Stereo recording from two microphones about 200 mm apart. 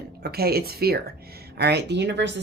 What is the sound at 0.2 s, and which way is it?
A woman's voice, 50° right (ahead or behind).